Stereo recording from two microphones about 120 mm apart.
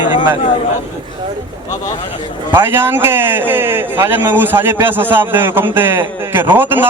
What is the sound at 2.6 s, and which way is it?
A man's voice, 20° right (ahead or behind).